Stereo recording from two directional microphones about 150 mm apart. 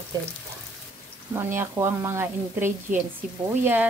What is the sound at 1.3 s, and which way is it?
Speech, 15° right (ahead or behind).